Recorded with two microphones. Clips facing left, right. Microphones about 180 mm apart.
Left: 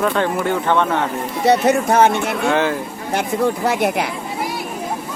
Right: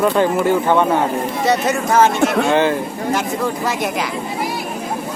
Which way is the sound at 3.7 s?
60° left (ahead or behind).